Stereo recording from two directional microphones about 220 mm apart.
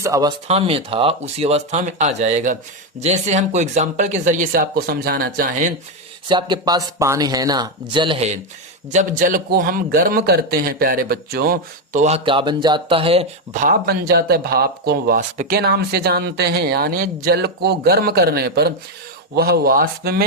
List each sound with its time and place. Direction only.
0.0 s speech: 15° right (ahead or behind)
0.4 s a man's voice: 25° right (ahead or behind)
6.2 s a man's voice: 20° right (ahead or behind); by 20.2 s 45° right (ahead or behind)